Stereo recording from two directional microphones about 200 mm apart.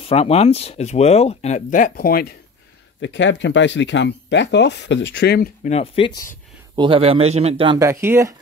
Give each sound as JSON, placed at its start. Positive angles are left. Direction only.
{"t": 0.0, "sound": "speech", "side_deg": 30}
{"t": 3.0, "sound": "speech", "side_deg": 65}
{"t": 5.6, "sound": "speech", "side_deg": 30}
{"t": 6.7, "sound": "speech", "side_deg": -25}